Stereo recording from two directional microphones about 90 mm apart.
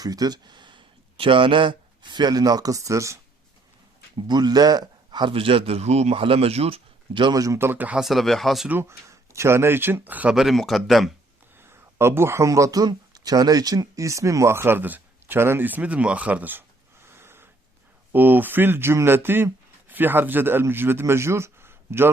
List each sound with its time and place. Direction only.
0.0 s speech: 45° right (ahead or behind)
4.3 s a man's voice: 50° right (ahead or behind)
5.2 s a man's voice: 90° right; by 7.3 s 65° right (ahead or behind)
7.3 s speech: 35° right (ahead or behind)
7.9 s speech: centre (ahead or behind)
8.7 s speech: 30° right (ahead or behind)
10.3 s speech: centre (ahead or behind)
11.5 s speech: 25° right (ahead or behind)